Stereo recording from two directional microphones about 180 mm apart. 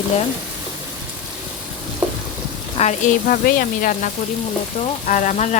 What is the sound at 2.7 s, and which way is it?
Speech, 40° left (ahead or behind).